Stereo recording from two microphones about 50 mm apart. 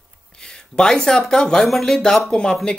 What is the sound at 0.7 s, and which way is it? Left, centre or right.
Speech, centre.